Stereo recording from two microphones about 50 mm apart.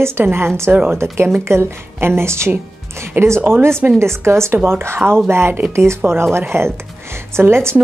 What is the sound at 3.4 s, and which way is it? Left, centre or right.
Speech, right.